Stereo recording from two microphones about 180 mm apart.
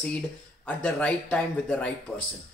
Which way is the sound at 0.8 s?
5° left (ahead or behind).